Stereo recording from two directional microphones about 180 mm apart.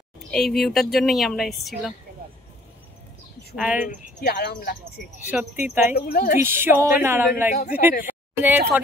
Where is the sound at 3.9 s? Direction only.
60° left (ahead or behind).